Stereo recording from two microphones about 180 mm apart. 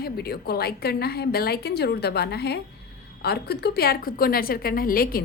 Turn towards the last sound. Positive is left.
turn(degrees=55)  # may be behind; listen again after turning